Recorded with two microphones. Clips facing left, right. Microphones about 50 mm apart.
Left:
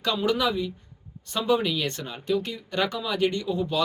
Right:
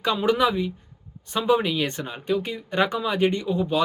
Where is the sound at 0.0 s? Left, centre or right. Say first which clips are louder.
Right 3 dB; right.